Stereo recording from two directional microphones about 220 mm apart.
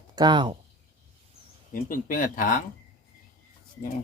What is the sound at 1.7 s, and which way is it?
Speech, 40° left (ahead or behind).